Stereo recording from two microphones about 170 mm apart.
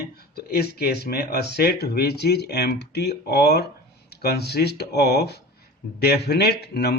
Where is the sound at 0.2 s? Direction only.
65° left (ahead or behind).